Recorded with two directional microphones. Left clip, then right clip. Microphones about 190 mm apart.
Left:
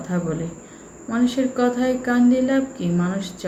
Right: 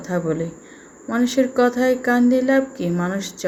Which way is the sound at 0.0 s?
45° right (ahead or behind).